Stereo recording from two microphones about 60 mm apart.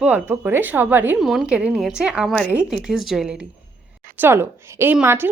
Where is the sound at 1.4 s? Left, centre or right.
Centre.